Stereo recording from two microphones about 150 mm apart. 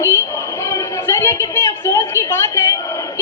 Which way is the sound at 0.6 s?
20° left (ahead or behind).